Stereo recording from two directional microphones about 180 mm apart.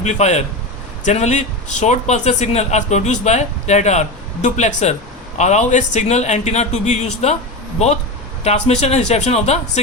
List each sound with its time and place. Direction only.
0.0 s speech: 40° left (ahead or behind)
8.4 s speech: 40° left (ahead or behind)